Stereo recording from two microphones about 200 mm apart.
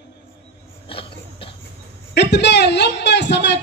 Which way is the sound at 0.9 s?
25° left (ahead or behind).